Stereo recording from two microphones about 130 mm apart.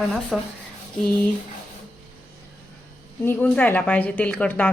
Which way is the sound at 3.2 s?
15° left (ahead or behind).